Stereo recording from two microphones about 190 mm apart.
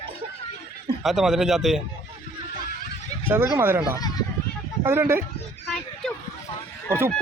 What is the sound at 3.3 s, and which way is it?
Speech, 15° right (ahead or behind).